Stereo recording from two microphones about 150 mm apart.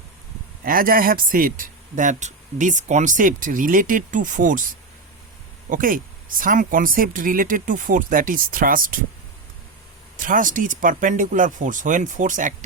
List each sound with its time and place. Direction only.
0.6 s speech: 70° right (ahead or behind)
5.6 s speech: 65° right (ahead or behind)
10.2 s speech: 60° right (ahead or behind)